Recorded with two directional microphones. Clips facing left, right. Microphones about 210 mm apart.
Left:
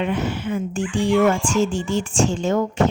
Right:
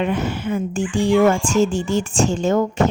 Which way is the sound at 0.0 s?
45° right (ahead or behind).